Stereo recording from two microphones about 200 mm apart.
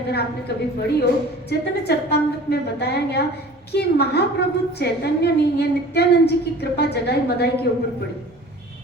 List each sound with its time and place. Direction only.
0.1 s a woman's voice: 55° left (ahead or behind)